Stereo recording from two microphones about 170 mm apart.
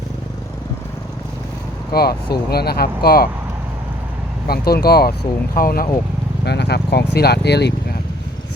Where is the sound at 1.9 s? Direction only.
65° left (ahead or behind).